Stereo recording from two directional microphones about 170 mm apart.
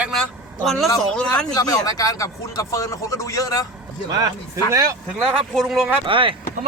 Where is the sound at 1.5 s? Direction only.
20° left (ahead or behind).